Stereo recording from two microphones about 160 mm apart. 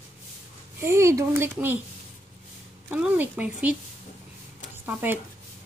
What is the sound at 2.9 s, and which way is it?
Speech, 10° right (ahead or behind).